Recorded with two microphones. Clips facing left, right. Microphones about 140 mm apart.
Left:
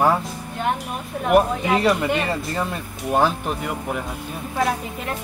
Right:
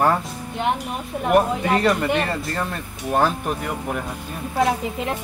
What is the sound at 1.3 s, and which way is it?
Speech, 5° left (ahead or behind).